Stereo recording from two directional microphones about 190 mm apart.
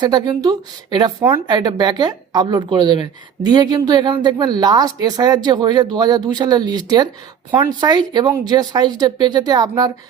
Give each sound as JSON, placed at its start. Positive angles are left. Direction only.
{"t": 0.0, "sound": "speech", "side_deg": -20}